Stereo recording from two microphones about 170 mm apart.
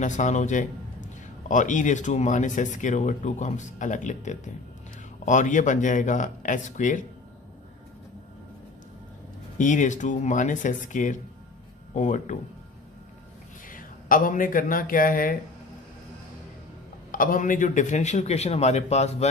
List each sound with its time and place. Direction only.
0.0 s a man's voice: 45° left (ahead or behind)
9.6 s a man's voice: 50° left (ahead or behind)
13.7 s speech: 55° left (ahead or behind)
17.1 s a man's voice: 55° left (ahead or behind)